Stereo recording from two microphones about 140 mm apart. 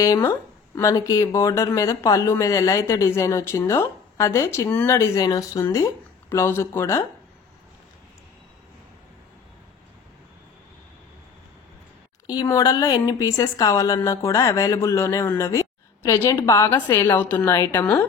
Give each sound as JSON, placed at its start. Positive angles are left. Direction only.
{"t": 0.0, "sound": "speech", "side_deg": 25}
{"t": 12.3, "sound": "a woman's voice", "side_deg": 25}